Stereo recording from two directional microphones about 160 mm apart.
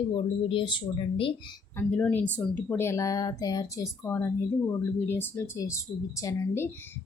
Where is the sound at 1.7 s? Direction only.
10° left (ahead or behind).